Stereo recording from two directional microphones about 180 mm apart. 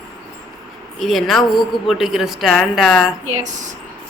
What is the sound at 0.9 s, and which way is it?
A woman's voice, centre (ahead or behind).